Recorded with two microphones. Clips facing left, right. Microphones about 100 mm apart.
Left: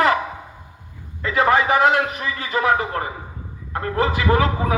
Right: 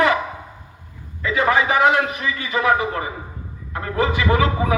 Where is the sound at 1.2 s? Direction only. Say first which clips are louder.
Left 1 dB; 45° left (ahead or behind).